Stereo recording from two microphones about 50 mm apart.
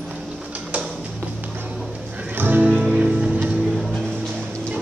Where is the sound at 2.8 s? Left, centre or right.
Right.